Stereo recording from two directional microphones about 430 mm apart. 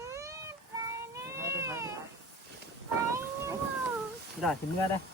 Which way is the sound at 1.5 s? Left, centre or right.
Centre.